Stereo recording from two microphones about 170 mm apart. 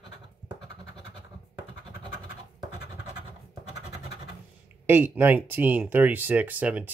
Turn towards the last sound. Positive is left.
turn(degrees=-10)  # may be behind; listen again after turning